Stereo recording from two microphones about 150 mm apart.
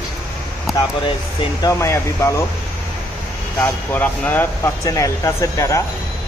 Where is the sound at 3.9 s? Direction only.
10° left (ahead or behind).